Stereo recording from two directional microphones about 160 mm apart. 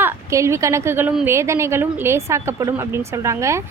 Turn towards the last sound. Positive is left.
turn(degrees=-20)  # may be behind; listen again after turning